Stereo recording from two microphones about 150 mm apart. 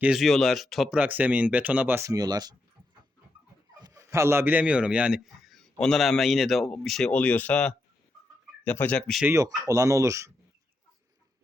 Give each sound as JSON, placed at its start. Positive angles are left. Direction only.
{"t": 0.0, "sound": "speech", "side_deg": 0}
{"t": 0.9, "sound": "speech", "side_deg": -10}
{"t": 3.8, "sound": "speech", "side_deg": -25}
{"t": 9.2, "sound": "speech", "side_deg": -20}